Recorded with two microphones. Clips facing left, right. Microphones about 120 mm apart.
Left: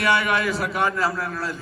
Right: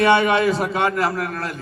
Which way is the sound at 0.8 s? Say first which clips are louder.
Right 3 dB; 65° right (ahead or behind).